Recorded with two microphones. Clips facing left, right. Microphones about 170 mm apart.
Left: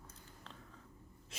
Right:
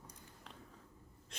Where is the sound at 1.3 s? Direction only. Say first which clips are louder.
Even; 5° left (ahead or behind).